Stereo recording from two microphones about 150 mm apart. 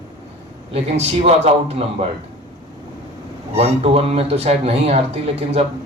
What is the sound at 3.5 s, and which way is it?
Speech, 40° right (ahead or behind).